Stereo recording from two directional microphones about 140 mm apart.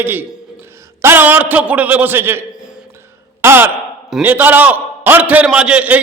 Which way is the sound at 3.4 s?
15° right (ahead or behind).